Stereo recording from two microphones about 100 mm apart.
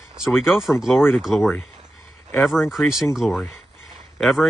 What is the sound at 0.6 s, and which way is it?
Speech, 5° right (ahead or behind).